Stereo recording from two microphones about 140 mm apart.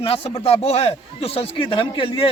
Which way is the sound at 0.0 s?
45° left (ahead or behind).